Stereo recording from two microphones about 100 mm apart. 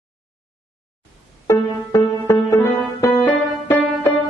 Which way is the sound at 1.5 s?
30° left (ahead or behind).